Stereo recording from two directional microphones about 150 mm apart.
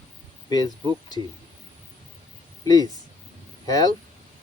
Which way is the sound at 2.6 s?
25° left (ahead or behind).